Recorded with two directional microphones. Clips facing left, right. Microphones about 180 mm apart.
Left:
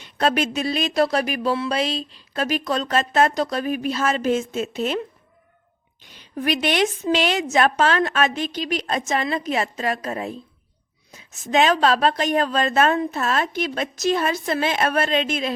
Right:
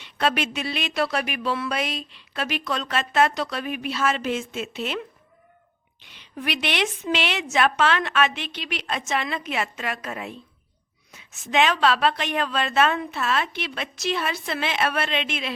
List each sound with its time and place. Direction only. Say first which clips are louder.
0.0 s a woman's voice: left 3 dB; 40° left (ahead or behind)